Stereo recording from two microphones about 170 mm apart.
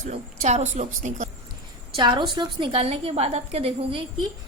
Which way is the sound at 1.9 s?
25° right (ahead or behind).